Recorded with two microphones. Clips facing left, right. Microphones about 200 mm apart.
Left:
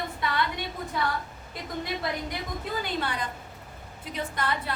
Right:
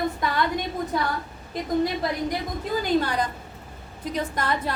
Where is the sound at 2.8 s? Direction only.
40° right (ahead or behind).